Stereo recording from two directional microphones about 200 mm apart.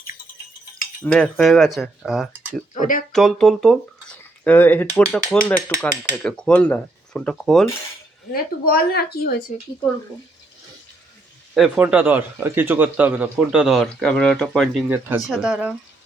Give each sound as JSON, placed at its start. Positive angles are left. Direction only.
{"t": 1.0, "sound": "a man's voice", "side_deg": 5}
{"t": 2.7, "sound": "speech", "side_deg": 40}
{"t": 3.1, "sound": "a man's voice", "side_deg": 0}
{"t": 8.3, "sound": "a woman's voice", "side_deg": 50}
{"t": 11.5, "sound": "a man's voice", "side_deg": 0}